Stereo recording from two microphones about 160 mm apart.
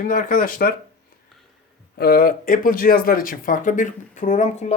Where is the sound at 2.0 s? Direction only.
70° left (ahead or behind).